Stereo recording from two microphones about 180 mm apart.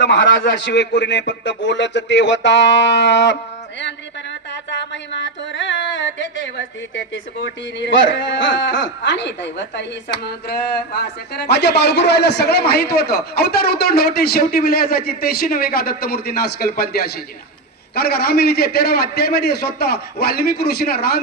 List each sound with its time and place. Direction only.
0.0 s a man's voice: 85° left
3.8 s a sound: 80° left
7.8 s speech: 90° left
10.2 s a man's voice: 65° left (ahead or behind)